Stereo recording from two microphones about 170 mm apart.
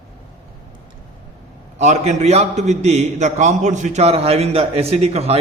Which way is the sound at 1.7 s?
40° right (ahead or behind).